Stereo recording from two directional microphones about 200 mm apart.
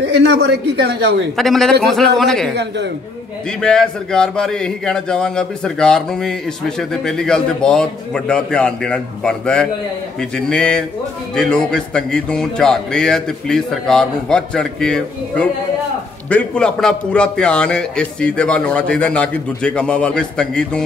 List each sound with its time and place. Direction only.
0.0 s a man's voice: 60° right (ahead or behind)
1.3 s a man's voice: centre (ahead or behind)
2.5 s a man's voice: 60° right (ahead or behind)
3.6 s a man's voice: 5° left (ahead or behind)